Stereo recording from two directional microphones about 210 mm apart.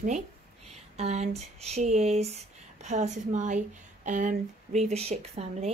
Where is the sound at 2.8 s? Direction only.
35° right (ahead or behind).